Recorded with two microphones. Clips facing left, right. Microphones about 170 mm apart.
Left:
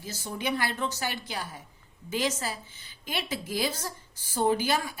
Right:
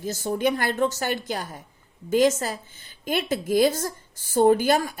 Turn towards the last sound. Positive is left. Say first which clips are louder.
# right 7 dB
turn(degrees=-50)  # may be behind; listen again after turning